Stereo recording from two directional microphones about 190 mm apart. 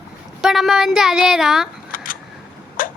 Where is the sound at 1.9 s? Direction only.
45° left (ahead or behind).